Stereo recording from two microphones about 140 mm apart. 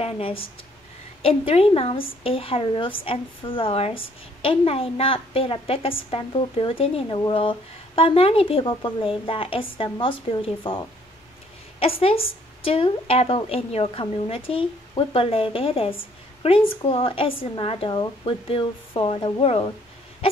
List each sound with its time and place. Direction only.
0.0 s a woman's voice: 40° left (ahead or behind)
11.8 s a woman's voice: 45° left (ahead or behind)